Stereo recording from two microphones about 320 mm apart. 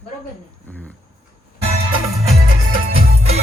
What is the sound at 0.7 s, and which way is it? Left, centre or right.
Speech, centre.